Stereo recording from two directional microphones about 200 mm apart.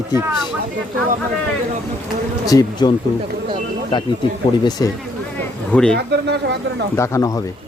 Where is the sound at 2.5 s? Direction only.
20° left (ahead or behind).